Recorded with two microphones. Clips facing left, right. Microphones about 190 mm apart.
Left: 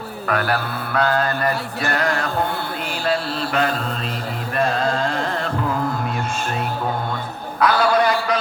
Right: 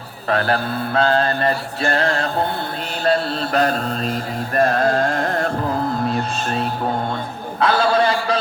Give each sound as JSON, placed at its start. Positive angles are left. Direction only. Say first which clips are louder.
{"t": 0.3, "sound": "mantra", "louder": "right 3 dB", "side_deg": -30}
{"t": 3.5, "sound": "music", "louder": "right 3 dB", "side_deg": -40}
{"t": 6.1, "sound": "speech", "louder": "right 3 dB", "side_deg": -35}
{"t": 7.6, "sound": "chant", "louder": "even", "side_deg": -25}